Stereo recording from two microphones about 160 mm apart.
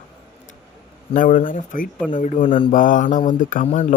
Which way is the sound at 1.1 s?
55° left (ahead or behind).